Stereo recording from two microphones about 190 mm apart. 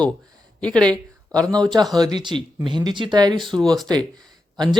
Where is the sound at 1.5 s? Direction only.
20° right (ahead or behind).